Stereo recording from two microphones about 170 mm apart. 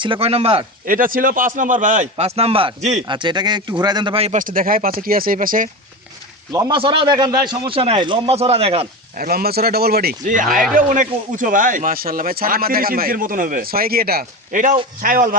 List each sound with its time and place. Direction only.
0.0 s speech: 30° right (ahead or behind)
0.9 s a man's voice: 55° right (ahead or behind); by 4.4 s 35° right (ahead or behind)
4.4 s speech: 55° right (ahead or behind)
6.5 s a man's voice: 25° right (ahead or behind)
9.1 s speech: 65° right (ahead or behind)